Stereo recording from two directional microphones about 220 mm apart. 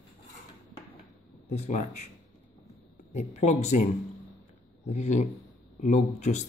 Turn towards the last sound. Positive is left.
turn(degrees=30)  # may be behind; listen again after turning